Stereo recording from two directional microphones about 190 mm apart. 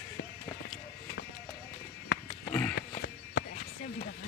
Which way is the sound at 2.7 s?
60° left (ahead or behind).